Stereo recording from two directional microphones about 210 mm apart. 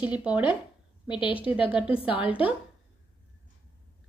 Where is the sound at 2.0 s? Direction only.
5° right (ahead or behind).